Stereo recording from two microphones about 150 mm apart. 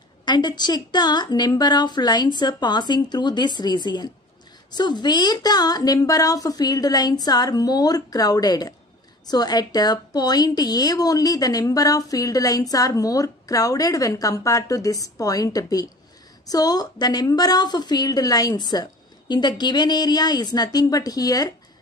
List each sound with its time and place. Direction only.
0.2 s a woman's voice: 30° left (ahead or behind)